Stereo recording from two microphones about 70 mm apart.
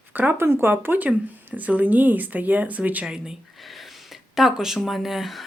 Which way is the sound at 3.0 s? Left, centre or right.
Centre.